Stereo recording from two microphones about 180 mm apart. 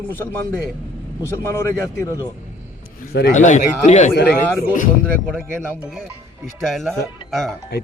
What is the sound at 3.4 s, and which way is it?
Speech, 40° left (ahead or behind).